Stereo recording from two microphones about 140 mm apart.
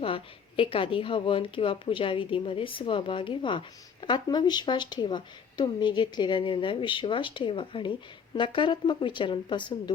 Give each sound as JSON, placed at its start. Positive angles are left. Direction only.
{"t": 0.0, "sound": "speech", "side_deg": 40}